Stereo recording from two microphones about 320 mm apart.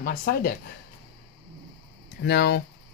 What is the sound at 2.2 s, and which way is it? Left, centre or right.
Speech, left.